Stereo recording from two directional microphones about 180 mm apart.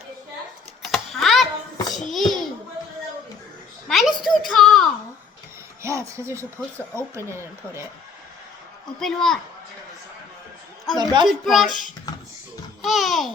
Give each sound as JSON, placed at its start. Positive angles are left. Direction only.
{"t": 0.9, "sound": "typing", "side_deg": 0}
{"t": 1.9, "sound": "a sound", "side_deg": 0}
{"t": 3.8, "sound": "a sound", "side_deg": 0}
{"t": 5.8, "sound": "speech", "side_deg": -15}
{"t": 9.0, "sound": "a child's voice", "side_deg": 0}
{"t": 10.9, "sound": "a woman's voice", "side_deg": -25}
{"t": 11.3, "sound": "a child's voice", "side_deg": 0}
{"t": 12.8, "sound": "a child's voice", "side_deg": 0}